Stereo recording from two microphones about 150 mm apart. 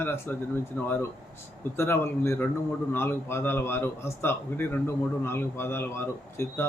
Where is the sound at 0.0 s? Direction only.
15° left (ahead or behind).